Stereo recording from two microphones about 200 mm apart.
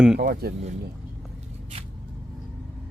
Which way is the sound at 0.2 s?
55° right (ahead or behind).